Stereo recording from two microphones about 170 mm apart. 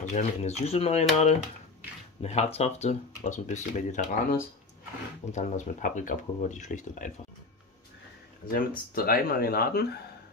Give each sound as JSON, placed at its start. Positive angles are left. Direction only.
{"t": 0.0, "sound": "speech", "side_deg": 40}
{"t": 8.5, "sound": "speech", "side_deg": 60}